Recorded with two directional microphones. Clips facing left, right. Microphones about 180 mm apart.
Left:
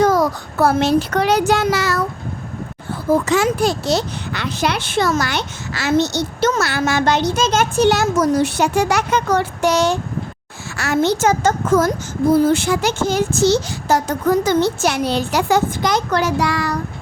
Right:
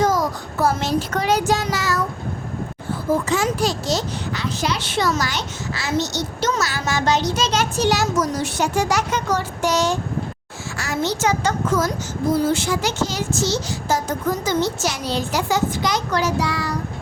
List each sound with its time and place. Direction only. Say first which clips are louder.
0.0 s child singing: left 4 dB; 60° left (ahead or behind)
3.2 s a child's voice: left 4 dB; 70° left (ahead or behind)